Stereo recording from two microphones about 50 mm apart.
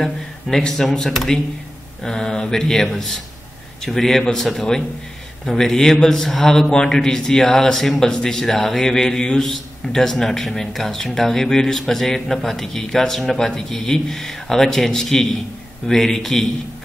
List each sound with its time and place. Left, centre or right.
0.0 s a man's voice: centre